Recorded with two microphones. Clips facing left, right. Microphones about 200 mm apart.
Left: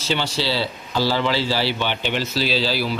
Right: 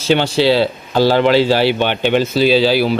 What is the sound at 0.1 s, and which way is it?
Speech, 60° right (ahead or behind).